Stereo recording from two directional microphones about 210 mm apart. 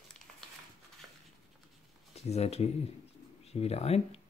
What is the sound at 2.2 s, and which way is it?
Speech, 30° left (ahead or behind).